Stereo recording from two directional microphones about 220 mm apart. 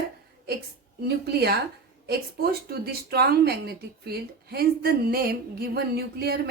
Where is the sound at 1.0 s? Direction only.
45° right (ahead or behind).